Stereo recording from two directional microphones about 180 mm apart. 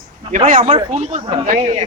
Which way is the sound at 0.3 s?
45° right (ahead or behind).